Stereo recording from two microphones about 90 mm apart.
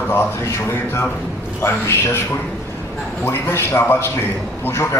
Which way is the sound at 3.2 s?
25° left (ahead or behind).